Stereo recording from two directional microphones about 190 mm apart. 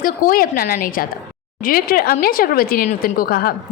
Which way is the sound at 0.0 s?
50° left (ahead or behind).